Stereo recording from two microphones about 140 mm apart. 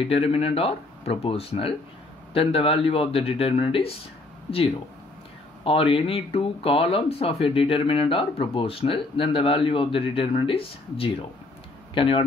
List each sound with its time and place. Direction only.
0.0 s speech: 45° left (ahead or behind)
5.6 s speech: 40° left (ahead or behind)